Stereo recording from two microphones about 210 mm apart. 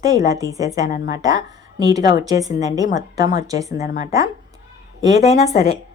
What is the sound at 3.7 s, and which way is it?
Speech, 35° left (ahead or behind).